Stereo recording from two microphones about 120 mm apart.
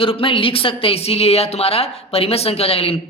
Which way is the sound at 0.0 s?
50° left (ahead or behind).